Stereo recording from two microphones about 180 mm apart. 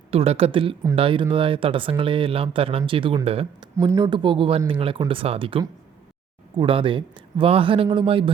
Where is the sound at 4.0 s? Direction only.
30° right (ahead or behind).